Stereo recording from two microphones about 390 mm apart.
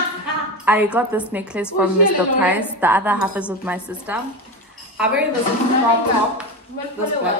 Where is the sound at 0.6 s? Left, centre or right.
Centre.